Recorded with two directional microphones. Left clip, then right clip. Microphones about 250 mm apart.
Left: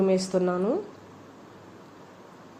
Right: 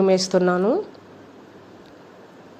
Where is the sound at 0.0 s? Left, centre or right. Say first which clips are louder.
Right 6 dB; centre.